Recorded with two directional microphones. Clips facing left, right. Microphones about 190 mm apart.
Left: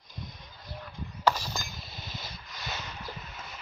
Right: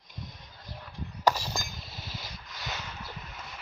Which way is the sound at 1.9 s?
5° right (ahead or behind).